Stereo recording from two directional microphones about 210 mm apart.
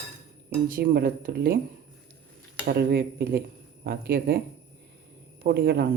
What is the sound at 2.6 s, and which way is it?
A man's voice, 50° right (ahead or behind).